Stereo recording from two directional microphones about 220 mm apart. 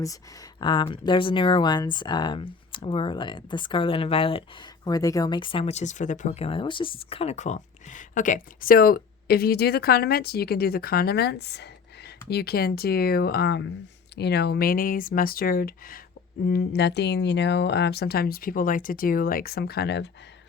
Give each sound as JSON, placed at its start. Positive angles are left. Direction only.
{"t": 0.6, "sound": "speech", "side_deg": 20}